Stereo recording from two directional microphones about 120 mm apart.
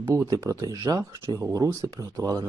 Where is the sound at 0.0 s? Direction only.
25° right (ahead or behind).